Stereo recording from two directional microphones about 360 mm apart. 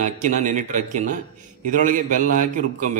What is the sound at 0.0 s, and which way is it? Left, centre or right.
Speech, right.